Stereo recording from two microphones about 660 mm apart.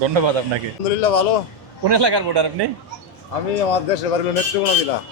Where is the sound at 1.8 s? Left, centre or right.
Right.